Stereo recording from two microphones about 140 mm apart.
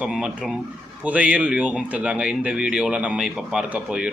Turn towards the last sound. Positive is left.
turn(degrees=-5)  # may be behind; listen again after turning